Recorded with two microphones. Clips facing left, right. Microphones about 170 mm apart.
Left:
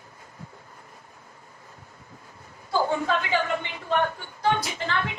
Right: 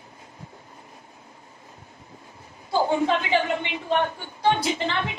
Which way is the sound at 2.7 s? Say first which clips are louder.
Right 3 dB; 20° right (ahead or behind).